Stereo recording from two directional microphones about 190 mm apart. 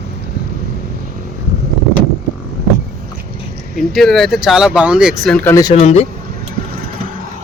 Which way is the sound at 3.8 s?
Centre (ahead or behind).